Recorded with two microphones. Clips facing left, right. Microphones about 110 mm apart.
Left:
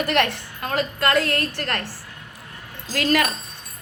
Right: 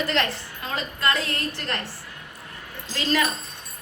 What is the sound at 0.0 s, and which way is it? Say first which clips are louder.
A woman's voice: left 4 dB; 60° left (ahead or behind).